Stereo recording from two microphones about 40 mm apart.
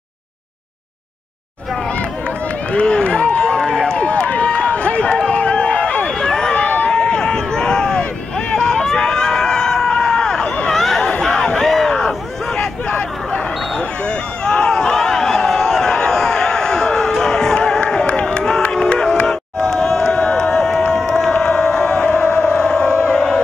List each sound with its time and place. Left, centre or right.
2.7 s run: left
4.0 s run: left
6.1 s run: centre
10.7 s chatter: centre
11.2 s crowd: centre
12.5 s hubbub: left
13.7 s a sound: left
18.7 s music: centre
19.2 s crowd: centre